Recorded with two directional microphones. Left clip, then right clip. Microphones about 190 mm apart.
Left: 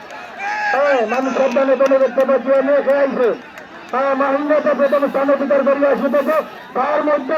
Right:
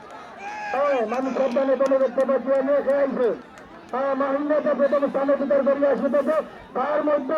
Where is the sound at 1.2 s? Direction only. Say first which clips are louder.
Left 7 dB; 30° left (ahead or behind).